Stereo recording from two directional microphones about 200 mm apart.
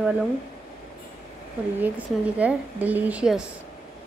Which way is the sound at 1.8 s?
5° right (ahead or behind).